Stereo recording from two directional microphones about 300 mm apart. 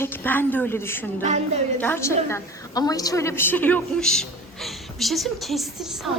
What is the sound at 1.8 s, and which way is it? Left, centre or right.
A woman's voice, centre.